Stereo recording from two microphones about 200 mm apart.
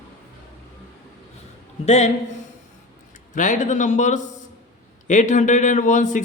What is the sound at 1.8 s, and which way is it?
Speech, 35° left (ahead or behind).